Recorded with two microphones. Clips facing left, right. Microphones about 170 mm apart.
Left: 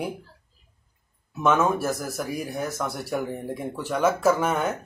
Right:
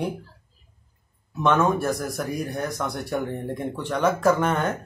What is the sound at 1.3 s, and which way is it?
Speech, 5° left (ahead or behind).